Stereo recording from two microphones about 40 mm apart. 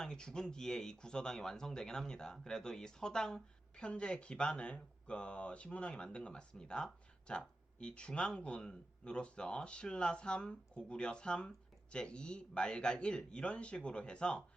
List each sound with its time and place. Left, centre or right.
0.0 s speech: centre